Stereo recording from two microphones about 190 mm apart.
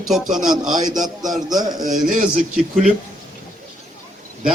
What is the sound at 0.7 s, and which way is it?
Speech, 20° right (ahead or behind).